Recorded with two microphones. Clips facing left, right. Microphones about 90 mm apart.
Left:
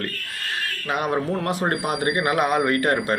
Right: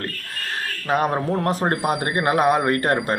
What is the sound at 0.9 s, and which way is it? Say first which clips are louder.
A man's voice: right 3 dB; 35° right (ahead or behind).